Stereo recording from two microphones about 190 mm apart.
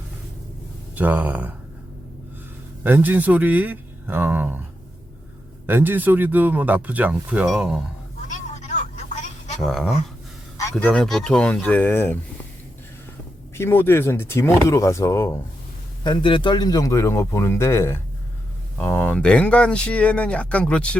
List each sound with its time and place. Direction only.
0.9 s speech: 10° right (ahead or behind)
2.8 s speech: 10° right (ahead or behind)
5.6 s speech: 10° right (ahead or behind)
8.3 s vehicle: 40° left (ahead or behind)
9.6 s speech: centre (ahead or behind)
13.6 s speech: 10° left (ahead or behind)
16.0 s speech: 25° left (ahead or behind); by 21.0 s 5° left (ahead or behind)